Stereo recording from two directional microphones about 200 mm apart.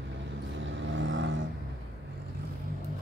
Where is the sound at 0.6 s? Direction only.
65° right (ahead or behind).